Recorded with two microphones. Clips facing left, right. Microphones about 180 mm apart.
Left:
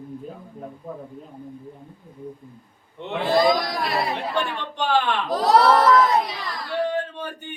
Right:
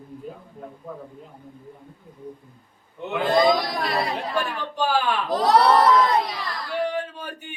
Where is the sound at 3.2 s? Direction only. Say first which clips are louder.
Even; centre (ahead or behind).